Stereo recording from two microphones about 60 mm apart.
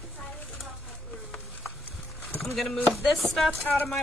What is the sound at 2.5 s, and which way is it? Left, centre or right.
Speech, centre.